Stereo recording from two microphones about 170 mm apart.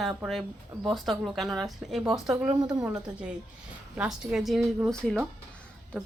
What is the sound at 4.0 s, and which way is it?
Speech, 5° right (ahead or behind).